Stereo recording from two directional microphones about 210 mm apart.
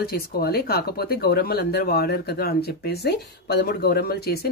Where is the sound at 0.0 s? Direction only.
45° left (ahead or behind).